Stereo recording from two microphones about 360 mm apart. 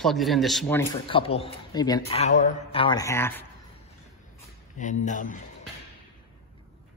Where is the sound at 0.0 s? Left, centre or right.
Centre.